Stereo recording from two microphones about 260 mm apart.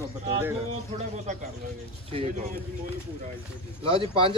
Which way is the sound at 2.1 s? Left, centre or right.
Right.